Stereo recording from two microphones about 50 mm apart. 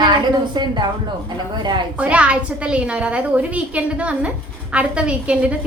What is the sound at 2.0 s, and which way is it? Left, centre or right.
A woman's voice, right.